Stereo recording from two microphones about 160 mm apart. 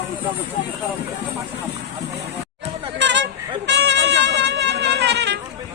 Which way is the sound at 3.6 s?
90° right.